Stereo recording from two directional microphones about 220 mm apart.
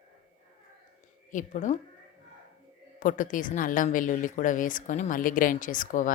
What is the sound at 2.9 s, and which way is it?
A woman's voice, 35° left (ahead or behind).